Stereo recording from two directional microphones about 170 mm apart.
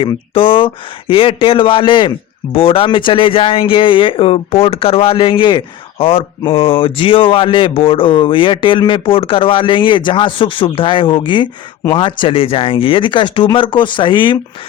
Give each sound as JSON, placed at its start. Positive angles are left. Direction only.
{"t": 0.0, "sound": "speech", "side_deg": 30}